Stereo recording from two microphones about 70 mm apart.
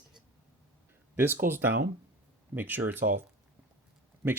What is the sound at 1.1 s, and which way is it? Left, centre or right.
Speech, right.